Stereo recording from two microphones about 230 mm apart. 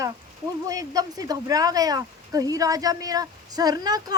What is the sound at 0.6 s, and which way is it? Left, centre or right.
Speech, centre.